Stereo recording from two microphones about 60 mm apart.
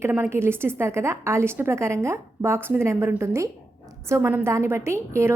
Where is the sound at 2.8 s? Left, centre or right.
Right.